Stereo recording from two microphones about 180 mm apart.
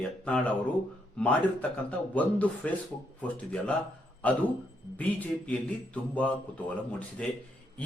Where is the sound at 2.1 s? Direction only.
10° left (ahead or behind).